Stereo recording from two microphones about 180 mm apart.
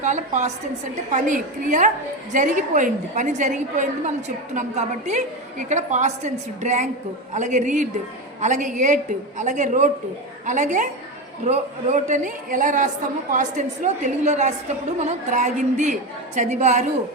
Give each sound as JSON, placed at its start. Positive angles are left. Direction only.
{"t": 0.0, "sound": "a woman's voice", "side_deg": -40}